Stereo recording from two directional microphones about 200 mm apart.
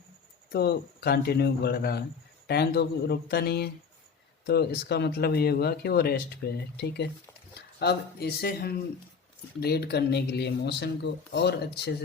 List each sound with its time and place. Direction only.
0.5 s speech: 50° left (ahead or behind)